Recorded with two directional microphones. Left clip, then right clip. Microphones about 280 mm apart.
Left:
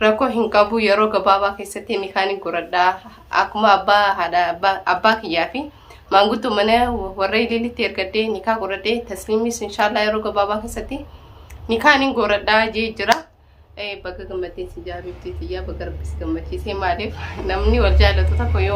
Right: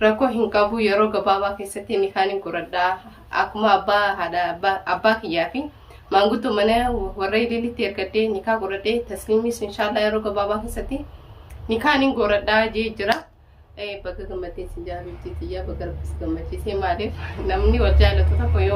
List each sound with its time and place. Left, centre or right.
0.0 s speech: centre